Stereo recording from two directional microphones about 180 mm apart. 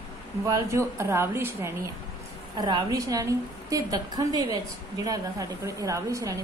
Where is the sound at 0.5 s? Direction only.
15° right (ahead or behind).